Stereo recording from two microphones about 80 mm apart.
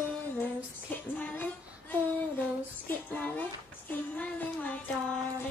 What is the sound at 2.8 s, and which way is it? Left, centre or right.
Speech, centre.